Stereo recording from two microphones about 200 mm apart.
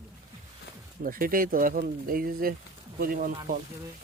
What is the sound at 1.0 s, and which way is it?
Speech, 45° right (ahead or behind).